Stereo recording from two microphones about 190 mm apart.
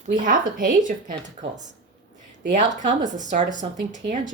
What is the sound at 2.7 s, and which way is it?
Speech, 40° right (ahead or behind).